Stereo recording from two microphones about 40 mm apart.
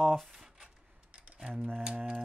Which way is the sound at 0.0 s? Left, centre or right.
Centre.